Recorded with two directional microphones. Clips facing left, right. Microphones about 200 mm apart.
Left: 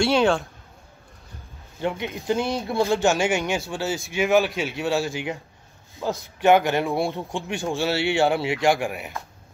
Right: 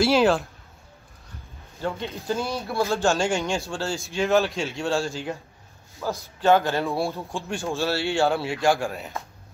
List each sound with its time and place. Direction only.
0.0 s a sound: centre (ahead or behind)
1.8 s a man's voice: 15° left (ahead or behind)
4.4 s a man's voice: centre (ahead or behind)
5.1 s a man's voice: 15° left (ahead or behind)